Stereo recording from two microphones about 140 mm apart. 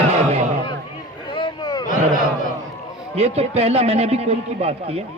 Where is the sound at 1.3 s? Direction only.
35° left (ahead or behind).